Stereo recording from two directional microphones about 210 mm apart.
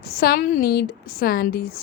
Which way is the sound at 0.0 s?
50° left (ahead or behind).